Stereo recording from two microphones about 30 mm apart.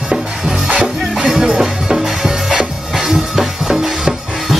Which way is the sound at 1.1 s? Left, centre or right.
Centre.